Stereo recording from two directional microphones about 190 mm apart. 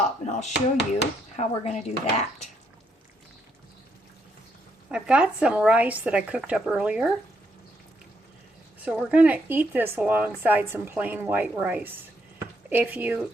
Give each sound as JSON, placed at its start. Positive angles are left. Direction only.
{"t": 0.0, "sound": "speech", "side_deg": 35}
{"t": 4.9, "sound": "speech", "side_deg": -5}
{"t": 8.8, "sound": "speech", "side_deg": -5}